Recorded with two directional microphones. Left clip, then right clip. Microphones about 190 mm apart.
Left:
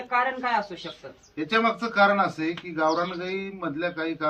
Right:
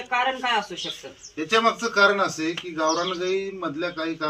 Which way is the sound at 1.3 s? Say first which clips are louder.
Right 3 dB; 10° left (ahead or behind).